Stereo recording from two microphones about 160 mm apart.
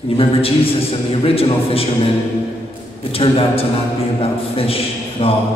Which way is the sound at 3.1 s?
35° left (ahead or behind).